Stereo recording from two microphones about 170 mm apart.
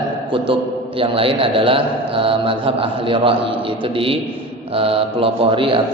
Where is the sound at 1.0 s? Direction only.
30° right (ahead or behind).